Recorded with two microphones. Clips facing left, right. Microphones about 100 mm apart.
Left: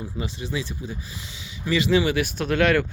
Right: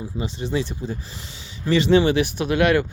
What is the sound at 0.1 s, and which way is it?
Speech, 20° right (ahead or behind).